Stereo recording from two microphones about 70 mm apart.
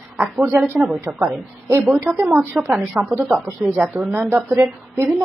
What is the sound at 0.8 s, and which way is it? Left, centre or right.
Speech, centre.